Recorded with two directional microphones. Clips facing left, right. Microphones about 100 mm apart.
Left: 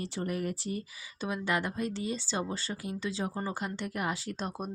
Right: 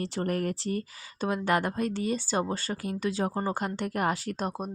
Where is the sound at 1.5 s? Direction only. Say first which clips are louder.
Right 4 dB; 50° right (ahead or behind).